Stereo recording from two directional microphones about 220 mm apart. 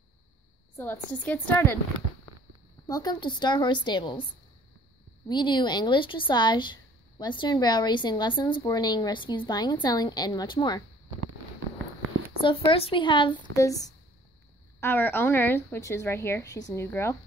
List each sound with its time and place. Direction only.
0.7 s speech: 10° left (ahead or behind)
2.9 s speech: 20° left (ahead or behind)
5.3 s speech: 20° left (ahead or behind)
12.4 s speech: 25° left (ahead or behind)